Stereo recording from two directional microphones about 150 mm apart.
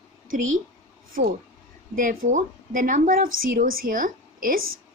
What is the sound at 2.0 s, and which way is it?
A woman's voice, 65° right (ahead or behind).